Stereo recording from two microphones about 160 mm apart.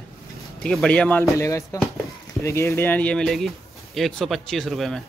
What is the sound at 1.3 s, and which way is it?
A man's voice, 20° left (ahead or behind).